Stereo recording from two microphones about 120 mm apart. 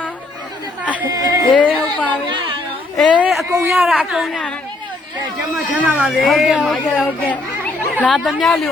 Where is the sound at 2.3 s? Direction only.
40° right (ahead or behind).